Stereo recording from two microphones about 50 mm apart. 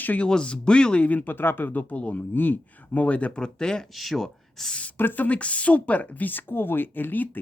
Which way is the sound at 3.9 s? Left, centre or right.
Centre.